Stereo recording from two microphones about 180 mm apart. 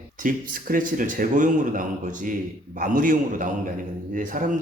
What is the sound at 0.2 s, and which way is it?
A man's voice, 50° right (ahead or behind).